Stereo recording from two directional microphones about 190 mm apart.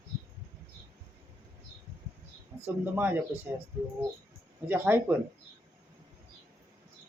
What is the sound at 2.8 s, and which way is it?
Speech, 10° right (ahead or behind).